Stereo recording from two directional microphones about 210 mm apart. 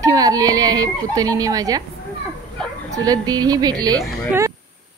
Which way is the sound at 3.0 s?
20° right (ahead or behind).